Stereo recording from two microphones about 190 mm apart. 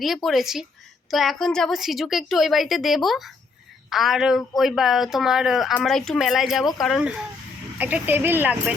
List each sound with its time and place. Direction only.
0.0 s a woman's voice: centre (ahead or behind)